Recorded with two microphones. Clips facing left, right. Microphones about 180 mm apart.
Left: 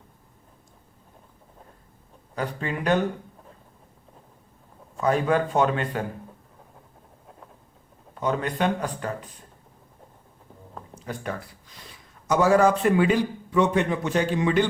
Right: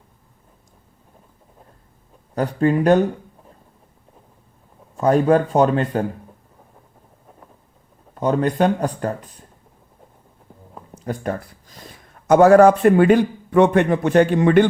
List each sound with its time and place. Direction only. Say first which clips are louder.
2.3 s speech: right 11 dB; 45° right (ahead or behind)
4.9 s a man's voice: right 7 dB; 45° right (ahead or behind)
8.2 s speech: right 7 dB; 40° right (ahead or behind)
11.0 s speech: right 7 dB; 45° right (ahead or behind)